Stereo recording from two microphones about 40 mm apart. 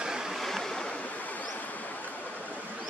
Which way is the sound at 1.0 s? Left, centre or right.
Left.